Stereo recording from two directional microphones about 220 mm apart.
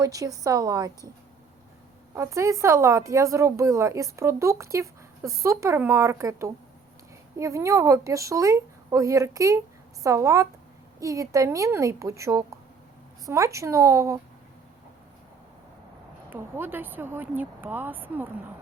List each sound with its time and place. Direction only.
0.0 s speech: 15° right (ahead or behind)
2.1 s speech: 15° right (ahead or behind)
16.3 s speech: 10° right (ahead or behind)